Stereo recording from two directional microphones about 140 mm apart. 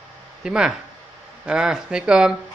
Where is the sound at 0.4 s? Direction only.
5° right (ahead or behind).